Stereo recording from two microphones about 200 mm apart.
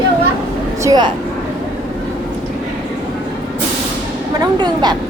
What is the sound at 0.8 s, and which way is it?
Vehicle, 20° right (ahead or behind).